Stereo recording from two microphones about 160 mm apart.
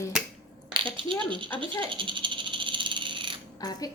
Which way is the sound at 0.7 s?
30° right (ahead or behind).